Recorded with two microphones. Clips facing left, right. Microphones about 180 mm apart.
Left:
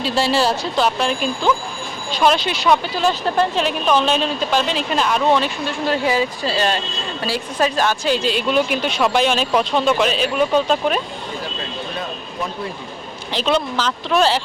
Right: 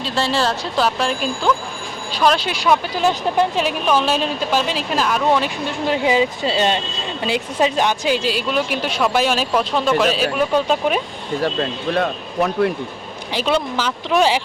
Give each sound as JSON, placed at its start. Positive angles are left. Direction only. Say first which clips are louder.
{"t": 0.0, "sound": "speech", "louder": "left 2 dB", "side_deg": 10}
{"t": 2.9, "sound": "speech", "louder": "right 1 dB", "side_deg": -15}
{"t": 11.9, "sound": "speech", "louder": "right 10 dB", "side_deg": -65}
{"t": 13.3, "sound": "speech", "louder": "even", "side_deg": -10}